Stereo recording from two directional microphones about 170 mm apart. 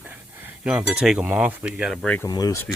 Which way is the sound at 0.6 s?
5° right (ahead or behind).